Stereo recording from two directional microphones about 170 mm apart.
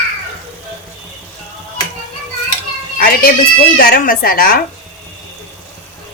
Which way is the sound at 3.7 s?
60° left (ahead or behind).